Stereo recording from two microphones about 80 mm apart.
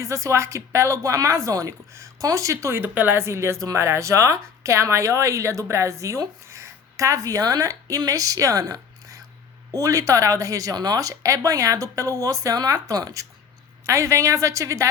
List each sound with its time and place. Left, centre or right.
0.0 s speech: right
2.8 s speech: right
13.8 s speech: right